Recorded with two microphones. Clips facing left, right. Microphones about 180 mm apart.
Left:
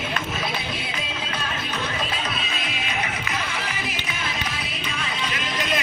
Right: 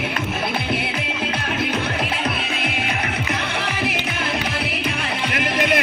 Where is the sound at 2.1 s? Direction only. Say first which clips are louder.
Right 5 dB; 60° right (ahead or behind).